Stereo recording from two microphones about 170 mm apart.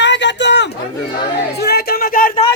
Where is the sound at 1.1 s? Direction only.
70° left (ahead or behind).